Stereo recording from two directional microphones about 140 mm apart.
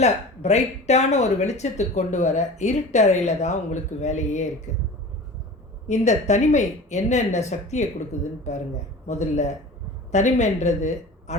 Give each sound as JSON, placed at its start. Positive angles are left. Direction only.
{"t": 0.0, "sound": "speech", "side_deg": 50}
{"t": 5.9, "sound": "speech", "side_deg": 55}
{"t": 9.0, "sound": "speech", "side_deg": 55}